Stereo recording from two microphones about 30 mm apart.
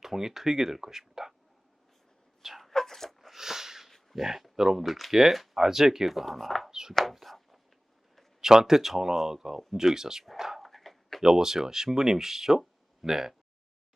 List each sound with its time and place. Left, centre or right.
0.0 s speech: centre
2.7 s a sound: centre
3.3 s a sound: centre
4.1 s speech: centre
6.1 s speech: centre
6.7 s chopping: centre
7.0 s chopping: centre
8.4 s speech: centre
10.6 s a sound: centre
11.2 s speech: centre